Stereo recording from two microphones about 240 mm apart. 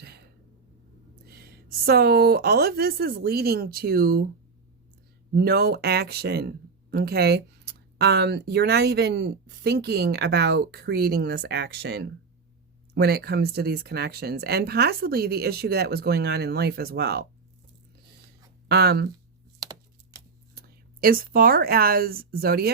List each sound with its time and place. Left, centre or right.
1.3 s speech: right
5.3 s speech: right
18.7 s speech: right
19.5 s a sound: centre
20.6 s speech: right